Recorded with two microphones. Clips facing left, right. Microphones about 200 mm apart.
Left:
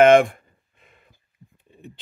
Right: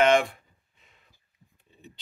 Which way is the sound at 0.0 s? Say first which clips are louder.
Left 8 dB; 50° left (ahead or behind).